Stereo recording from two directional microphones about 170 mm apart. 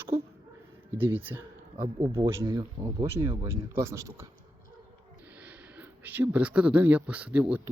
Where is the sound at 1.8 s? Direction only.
25° right (ahead or behind).